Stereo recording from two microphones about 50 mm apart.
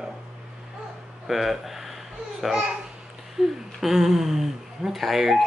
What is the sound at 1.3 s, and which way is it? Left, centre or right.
A woman's voice, centre.